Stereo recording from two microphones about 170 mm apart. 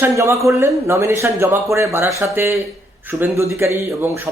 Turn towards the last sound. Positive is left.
turn(degrees=-15)  # may be behind; listen again after turning